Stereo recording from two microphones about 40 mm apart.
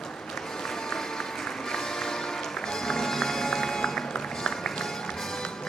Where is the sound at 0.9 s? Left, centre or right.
Centre.